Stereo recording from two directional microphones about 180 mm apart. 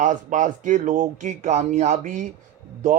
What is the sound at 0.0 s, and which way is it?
A man's voice, 45° right (ahead or behind).